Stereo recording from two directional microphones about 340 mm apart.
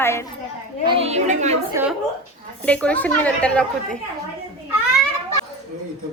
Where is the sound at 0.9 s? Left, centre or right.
Centre.